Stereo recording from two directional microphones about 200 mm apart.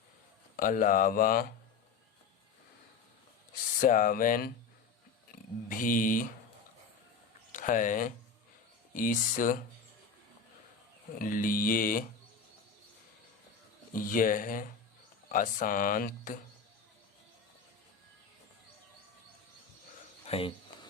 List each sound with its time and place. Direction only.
0.5 s speech: 45° left (ahead or behind)
3.8 s speech: 40° left (ahead or behind)
5.6 s speech: 40° left (ahead or behind)
7.5 s speech: 40° left (ahead or behind)
11.2 s speech: 45° left (ahead or behind)
13.9 s speech: 45° left (ahead or behind)
20.2 s speech: 30° left (ahead or behind)